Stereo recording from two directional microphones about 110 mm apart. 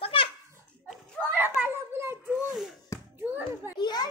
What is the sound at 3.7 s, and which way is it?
Children playing, 40° left (ahead or behind).